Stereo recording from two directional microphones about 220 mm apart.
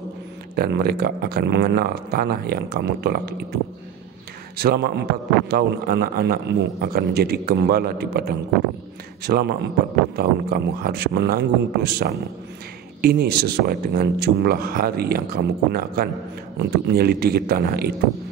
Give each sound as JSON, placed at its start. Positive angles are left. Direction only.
{"t": 0.6, "sound": "speech", "side_deg": -45}
{"t": 4.6, "sound": "speech", "side_deg": -45}